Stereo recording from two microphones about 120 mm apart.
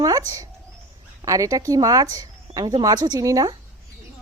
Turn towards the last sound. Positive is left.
turn(degrees=-30)  # may be behind; listen again after turning